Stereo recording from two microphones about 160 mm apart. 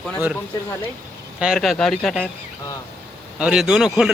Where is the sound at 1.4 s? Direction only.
Centre (ahead or behind).